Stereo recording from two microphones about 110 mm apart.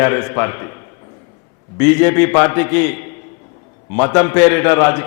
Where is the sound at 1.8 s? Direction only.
25° left (ahead or behind).